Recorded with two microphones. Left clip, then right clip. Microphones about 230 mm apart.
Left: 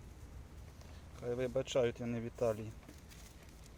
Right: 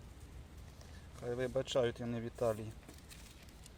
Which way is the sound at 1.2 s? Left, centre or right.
Centre.